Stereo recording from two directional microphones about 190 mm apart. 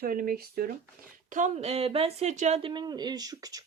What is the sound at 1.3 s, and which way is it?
A woman's voice, 40° right (ahead or behind).